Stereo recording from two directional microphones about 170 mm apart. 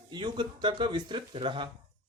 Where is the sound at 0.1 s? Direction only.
25° right (ahead or behind).